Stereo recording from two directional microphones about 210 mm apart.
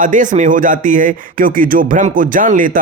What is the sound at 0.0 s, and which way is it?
Speech, 40° right (ahead or behind).